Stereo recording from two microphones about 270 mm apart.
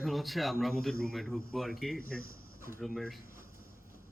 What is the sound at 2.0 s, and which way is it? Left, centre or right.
Speech, left.